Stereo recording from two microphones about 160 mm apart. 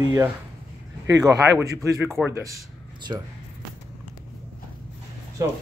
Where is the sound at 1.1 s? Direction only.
25° right (ahead or behind).